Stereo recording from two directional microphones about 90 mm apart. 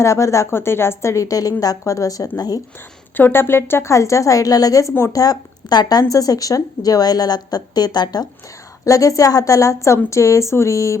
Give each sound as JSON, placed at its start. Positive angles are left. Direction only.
{"t": 0.0, "sound": "a woman's voice", "side_deg": 35}
{"t": 3.2, "sound": "a woman's voice", "side_deg": 25}
{"t": 5.2, "sound": "speech", "side_deg": 45}
{"t": 8.8, "sound": "a woman's voice", "side_deg": 40}